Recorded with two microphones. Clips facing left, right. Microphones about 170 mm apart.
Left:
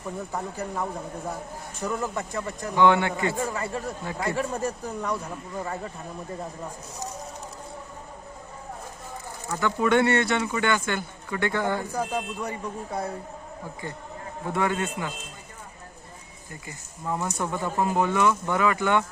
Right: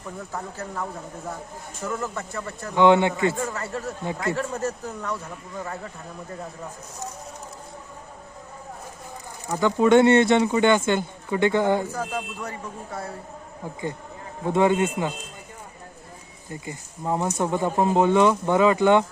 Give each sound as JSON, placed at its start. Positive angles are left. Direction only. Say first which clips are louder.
{"t": 0.3, "sound": "speech", "louder": "left 1 dB", "side_deg": 15}
{"t": 2.7, "sound": "speech", "louder": "right 3 dB", "side_deg": -20}
{"t": 3.2, "sound": "speech", "louder": "right 2 dB", "side_deg": 20}
{"t": 9.5, "sound": "speech", "louder": "right 5 dB", "side_deg": -15}
{"t": 11.9, "sound": "speech", "louder": "left 1 dB", "side_deg": 15}
{"t": 14.4, "sound": "speech", "louder": "right 7 dB", "side_deg": -20}
{"t": 16.5, "sound": "speech", "louder": "right 7 dB", "side_deg": -25}